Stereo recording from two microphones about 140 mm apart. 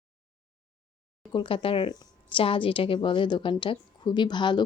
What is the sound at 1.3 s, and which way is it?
Speech, 40° left (ahead or behind).